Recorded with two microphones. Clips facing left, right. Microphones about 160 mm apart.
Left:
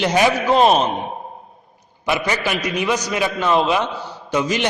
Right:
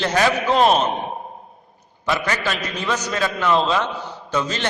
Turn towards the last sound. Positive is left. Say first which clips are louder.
# left 4 dB
turn(degrees=15)  # may be behind; listen again after turning